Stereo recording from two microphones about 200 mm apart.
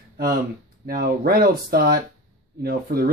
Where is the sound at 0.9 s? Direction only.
50° right (ahead or behind).